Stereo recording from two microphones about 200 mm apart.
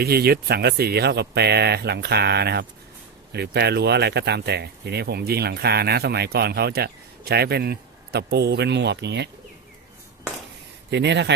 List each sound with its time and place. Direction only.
0.0 s speech: 50° right (ahead or behind)
10.9 s speech: 60° right (ahead or behind)